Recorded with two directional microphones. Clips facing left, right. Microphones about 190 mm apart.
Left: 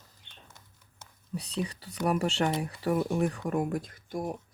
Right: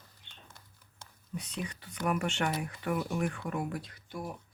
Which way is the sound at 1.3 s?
35° left (ahead or behind).